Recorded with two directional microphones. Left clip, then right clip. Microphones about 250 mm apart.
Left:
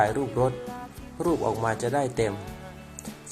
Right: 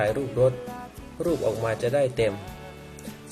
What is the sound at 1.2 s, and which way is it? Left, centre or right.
Speech, centre.